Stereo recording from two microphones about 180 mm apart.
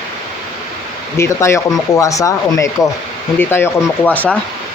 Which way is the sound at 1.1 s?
15° left (ahead or behind).